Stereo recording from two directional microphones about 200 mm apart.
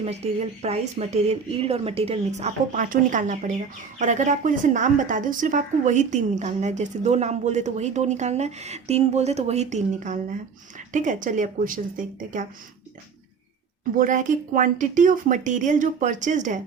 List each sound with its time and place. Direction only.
0.0 s speech: 30° right (ahead or behind)
13.9 s speech: 40° right (ahead or behind)